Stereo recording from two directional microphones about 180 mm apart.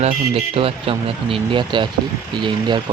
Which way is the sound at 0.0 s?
35° right (ahead or behind).